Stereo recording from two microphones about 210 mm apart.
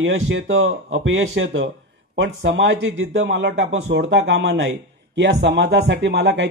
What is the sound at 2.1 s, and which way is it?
A man's voice, 55° right (ahead or behind).